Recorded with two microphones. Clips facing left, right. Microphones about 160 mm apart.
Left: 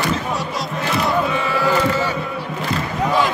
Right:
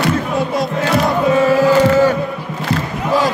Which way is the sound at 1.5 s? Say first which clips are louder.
Right 7 dB; 45° right (ahead or behind).